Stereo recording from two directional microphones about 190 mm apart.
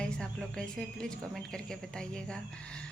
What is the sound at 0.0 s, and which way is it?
A woman's voice, 5° left (ahead or behind).